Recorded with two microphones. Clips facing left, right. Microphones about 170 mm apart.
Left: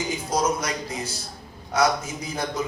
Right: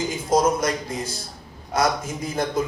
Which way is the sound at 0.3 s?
50° right (ahead or behind).